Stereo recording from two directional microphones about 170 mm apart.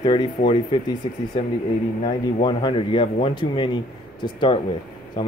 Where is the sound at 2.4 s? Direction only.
30° left (ahead or behind).